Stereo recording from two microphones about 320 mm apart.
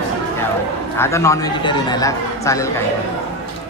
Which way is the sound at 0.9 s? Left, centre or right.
Centre.